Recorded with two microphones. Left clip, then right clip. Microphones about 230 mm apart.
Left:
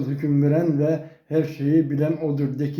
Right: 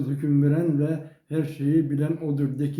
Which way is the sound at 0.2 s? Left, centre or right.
Centre.